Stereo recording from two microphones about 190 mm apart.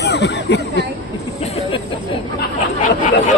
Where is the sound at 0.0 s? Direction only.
60° left (ahead or behind).